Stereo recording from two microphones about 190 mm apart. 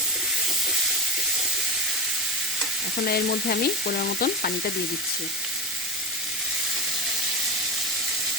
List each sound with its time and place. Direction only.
3.1 s stir: 55° left (ahead or behind)